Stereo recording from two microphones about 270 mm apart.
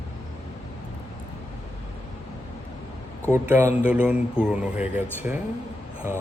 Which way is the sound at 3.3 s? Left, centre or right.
Centre.